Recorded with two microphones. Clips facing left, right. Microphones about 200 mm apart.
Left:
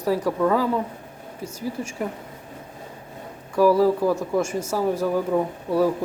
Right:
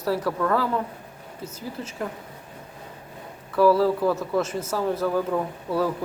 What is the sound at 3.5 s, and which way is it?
A woman's voice, 15° left (ahead or behind).